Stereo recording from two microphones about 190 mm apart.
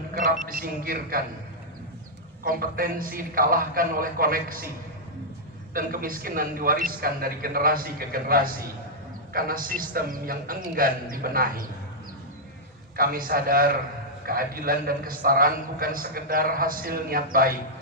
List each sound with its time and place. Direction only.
0.1 s a man's voice: 45° right (ahead or behind)
2.4 s a man's voice: 50° right (ahead or behind)
5.7 s a man's voice: 50° right (ahead or behind)
12.9 s a man's voice: 50° right (ahead or behind)